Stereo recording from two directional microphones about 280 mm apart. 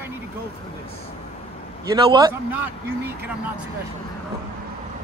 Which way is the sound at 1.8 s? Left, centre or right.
Centre.